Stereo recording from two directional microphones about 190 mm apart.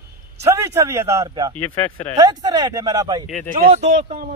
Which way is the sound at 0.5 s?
15° right (ahead or behind).